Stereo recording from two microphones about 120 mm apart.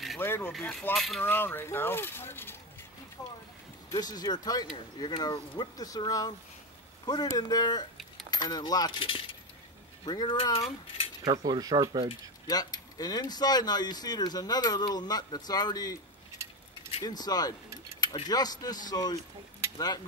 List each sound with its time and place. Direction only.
0.2 s speech: 20° left (ahead or behind)
0.5 s speech: 5° left (ahead or behind)
1.2 s speech: 15° left (ahead or behind)
3.2 s speech: 30° left (ahead or behind)
9.0 s speech: 45° left (ahead or behind)
11.2 s speech: 35° right (ahead or behind)
12.4 s speech: 35° left (ahead or behind)
16.4 s keys jangling: 25° right (ahead or behind)
17.0 s speech: 35° left (ahead or behind)